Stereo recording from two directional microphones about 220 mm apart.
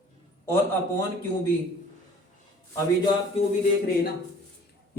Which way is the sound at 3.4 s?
25° left (ahead or behind).